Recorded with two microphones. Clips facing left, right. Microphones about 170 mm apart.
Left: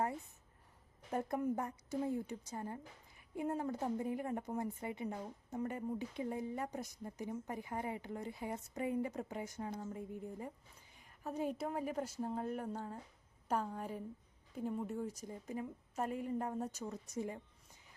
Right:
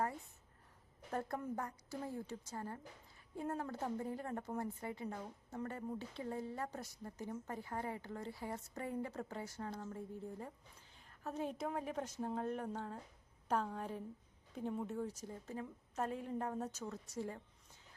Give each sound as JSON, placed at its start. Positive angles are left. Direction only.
{"t": 1.1, "sound": "a woman's voice", "side_deg": 15}